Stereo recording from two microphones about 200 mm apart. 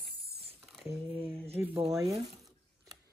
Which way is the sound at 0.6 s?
Centre (ahead or behind).